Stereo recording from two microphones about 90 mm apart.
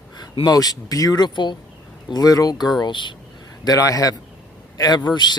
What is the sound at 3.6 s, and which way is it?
A man's voice, 40° left (ahead or behind).